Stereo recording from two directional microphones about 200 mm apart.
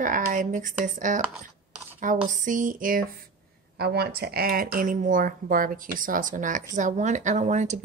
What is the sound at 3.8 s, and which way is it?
A woman's voice, 55° right (ahead or behind).